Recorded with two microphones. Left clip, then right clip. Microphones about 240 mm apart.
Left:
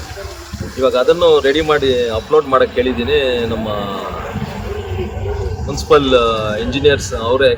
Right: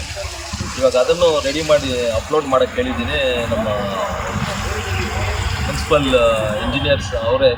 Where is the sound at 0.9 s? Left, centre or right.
Centre.